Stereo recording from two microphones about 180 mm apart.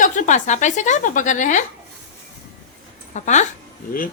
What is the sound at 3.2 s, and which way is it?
Speech, 40° left (ahead or behind).